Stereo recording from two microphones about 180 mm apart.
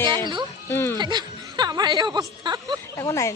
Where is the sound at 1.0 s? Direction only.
25° right (ahead or behind).